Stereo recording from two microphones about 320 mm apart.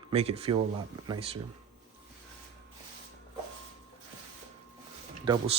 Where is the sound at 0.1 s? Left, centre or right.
Centre.